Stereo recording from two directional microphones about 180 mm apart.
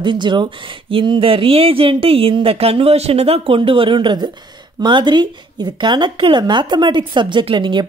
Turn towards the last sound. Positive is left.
turn(degrees=-25)  # may be behind; listen again after turning